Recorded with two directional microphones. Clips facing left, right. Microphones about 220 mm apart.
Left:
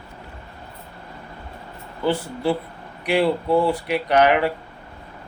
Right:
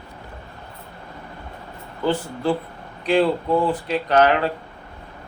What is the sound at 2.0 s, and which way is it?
Speech, 10° left (ahead or behind).